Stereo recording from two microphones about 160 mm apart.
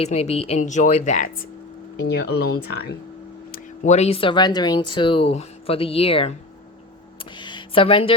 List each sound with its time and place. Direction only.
0.0 s speech: 40° left (ahead or behind)
2.0 s speech: 90° left
3.8 s speech: 45° left (ahead or behind)
7.3 s a sound: 30° left (ahead or behind)